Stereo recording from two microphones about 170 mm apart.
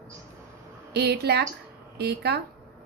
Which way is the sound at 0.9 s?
75° right (ahead or behind).